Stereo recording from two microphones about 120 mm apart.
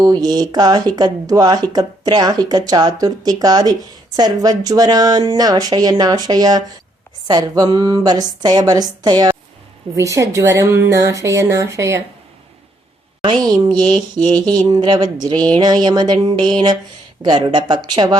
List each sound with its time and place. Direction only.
0.0 s speech: 35° right (ahead or behind)
13.2 s speech: 40° right (ahead or behind)
14.8 s speech: 45° right (ahead or behind)